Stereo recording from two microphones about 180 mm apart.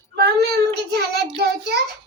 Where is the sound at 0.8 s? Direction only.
65° right (ahead or behind).